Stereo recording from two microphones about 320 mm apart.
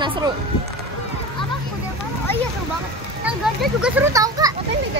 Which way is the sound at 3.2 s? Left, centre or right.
Centre.